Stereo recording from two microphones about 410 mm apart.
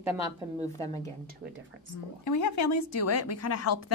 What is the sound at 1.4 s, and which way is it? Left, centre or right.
Speech, right.